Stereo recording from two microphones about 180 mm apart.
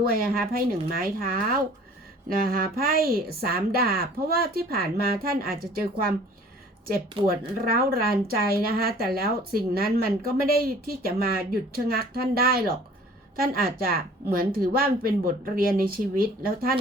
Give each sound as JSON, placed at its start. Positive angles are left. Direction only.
{"t": 0.0, "sound": "a woman's voice", "side_deg": -55}
{"t": 7.3, "sound": "a woman's voice", "side_deg": -55}